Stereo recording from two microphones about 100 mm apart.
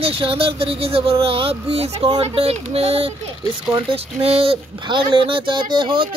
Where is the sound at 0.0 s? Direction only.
70° right (ahead or behind).